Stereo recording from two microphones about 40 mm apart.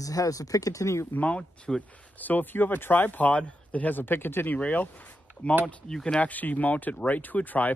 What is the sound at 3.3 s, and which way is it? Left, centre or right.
Speech, left.